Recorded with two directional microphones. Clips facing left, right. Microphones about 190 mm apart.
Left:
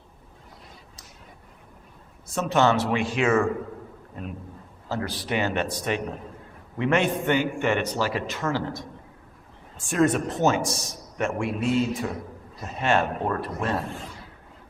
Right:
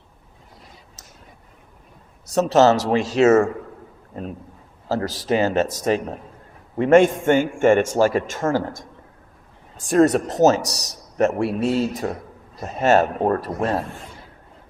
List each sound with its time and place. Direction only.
2.2 s a man's voice: 40° right (ahead or behind)